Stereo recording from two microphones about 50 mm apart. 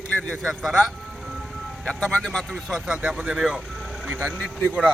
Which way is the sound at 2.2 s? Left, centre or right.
Centre.